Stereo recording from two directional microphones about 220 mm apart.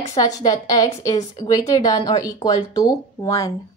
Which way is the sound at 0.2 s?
15° left (ahead or behind).